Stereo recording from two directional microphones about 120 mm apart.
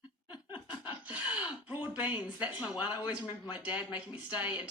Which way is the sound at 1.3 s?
10° right (ahead or behind).